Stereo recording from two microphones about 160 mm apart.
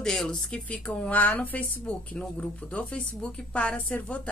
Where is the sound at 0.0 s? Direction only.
5° left (ahead or behind).